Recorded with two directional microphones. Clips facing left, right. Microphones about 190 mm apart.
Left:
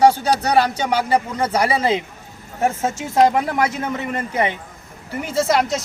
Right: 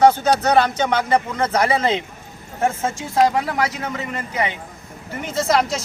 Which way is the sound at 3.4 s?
50° left (ahead or behind).